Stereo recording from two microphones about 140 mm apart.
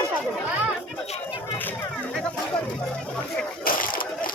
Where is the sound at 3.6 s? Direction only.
90° left.